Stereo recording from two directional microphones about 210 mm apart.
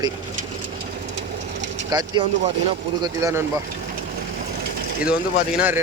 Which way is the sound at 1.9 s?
20° right (ahead or behind).